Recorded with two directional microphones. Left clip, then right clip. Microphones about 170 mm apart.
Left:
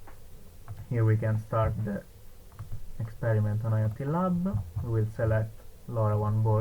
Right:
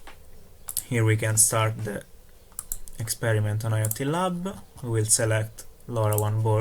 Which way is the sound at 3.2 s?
35° right (ahead or behind).